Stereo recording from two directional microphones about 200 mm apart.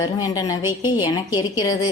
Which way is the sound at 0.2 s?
20° left (ahead or behind).